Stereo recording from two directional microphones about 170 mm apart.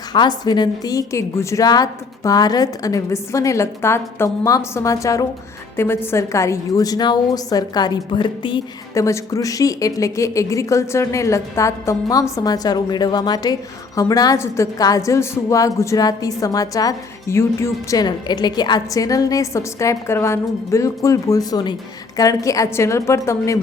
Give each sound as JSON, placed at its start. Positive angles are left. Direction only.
{"t": 0.1, "sound": "a woman's voice", "side_deg": 25}